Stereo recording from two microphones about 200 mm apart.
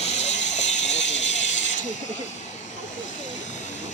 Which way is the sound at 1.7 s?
35° left (ahead or behind).